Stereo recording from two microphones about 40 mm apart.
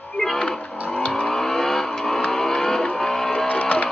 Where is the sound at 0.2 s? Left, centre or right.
Left.